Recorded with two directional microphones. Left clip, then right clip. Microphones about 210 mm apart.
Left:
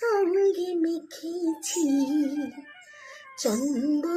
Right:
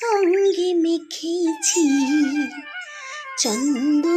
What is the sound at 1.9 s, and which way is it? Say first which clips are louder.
Music: right 6 dB; 45° right (ahead or behind).